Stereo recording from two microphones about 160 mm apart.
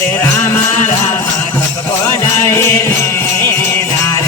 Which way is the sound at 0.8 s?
50° left (ahead or behind).